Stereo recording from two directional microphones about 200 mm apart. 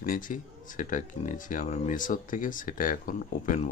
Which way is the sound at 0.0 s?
45° left (ahead or behind).